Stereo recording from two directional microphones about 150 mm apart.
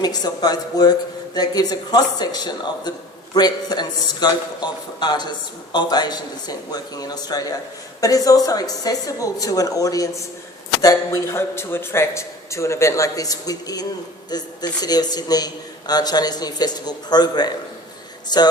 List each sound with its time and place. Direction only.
0.0 s a man's voice: 25° left (ahead or behind)